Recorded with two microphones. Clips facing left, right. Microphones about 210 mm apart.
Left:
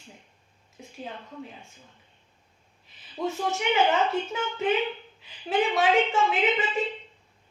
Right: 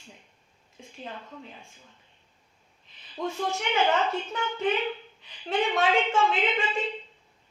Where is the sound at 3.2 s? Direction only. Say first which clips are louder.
Left 2 dB; 5° left (ahead or behind).